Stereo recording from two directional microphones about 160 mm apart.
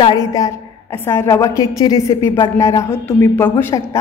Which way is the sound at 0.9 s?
15° left (ahead or behind).